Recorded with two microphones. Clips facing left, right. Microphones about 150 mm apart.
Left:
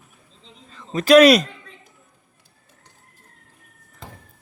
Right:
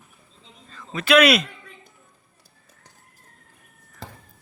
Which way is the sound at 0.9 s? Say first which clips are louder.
Left 6 dB; 40° left (ahead or behind).